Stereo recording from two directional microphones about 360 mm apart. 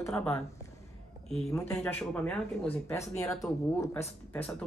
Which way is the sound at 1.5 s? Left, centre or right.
Centre.